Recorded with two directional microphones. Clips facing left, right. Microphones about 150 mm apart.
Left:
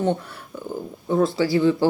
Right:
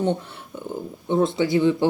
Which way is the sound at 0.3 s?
25° right (ahead or behind).